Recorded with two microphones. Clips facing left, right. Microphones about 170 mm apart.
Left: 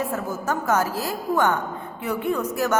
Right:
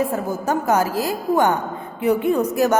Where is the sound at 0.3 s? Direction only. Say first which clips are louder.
Right 4 dB; 15° right (ahead or behind).